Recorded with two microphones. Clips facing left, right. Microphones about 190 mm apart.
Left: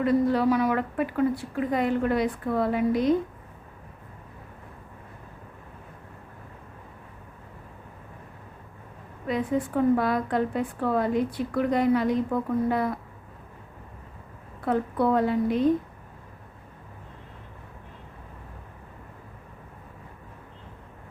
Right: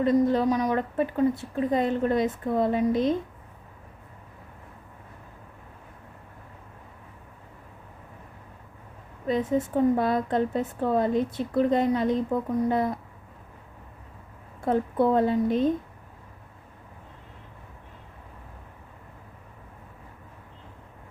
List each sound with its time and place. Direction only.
0.0 s a woman's voice: 20° right (ahead or behind)
9.2 s a woman's voice: 25° right (ahead or behind)
14.6 s a woman's voice: 25° right (ahead or behind)